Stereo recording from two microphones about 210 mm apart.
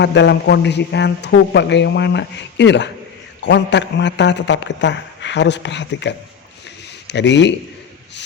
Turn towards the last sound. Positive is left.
turn(degrees=55)  # may be behind; listen again after turning